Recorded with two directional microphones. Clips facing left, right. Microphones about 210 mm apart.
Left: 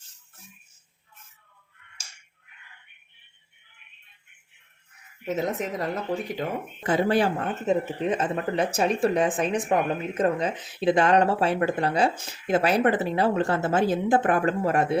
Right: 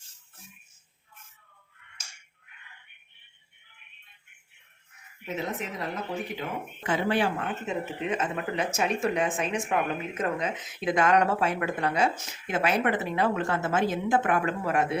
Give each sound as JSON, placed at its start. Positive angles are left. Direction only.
{"t": 5.2, "sound": "a woman's voice", "side_deg": 45}